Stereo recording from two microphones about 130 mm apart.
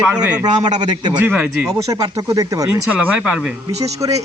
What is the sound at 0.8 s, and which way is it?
Speech, 35° right (ahead or behind).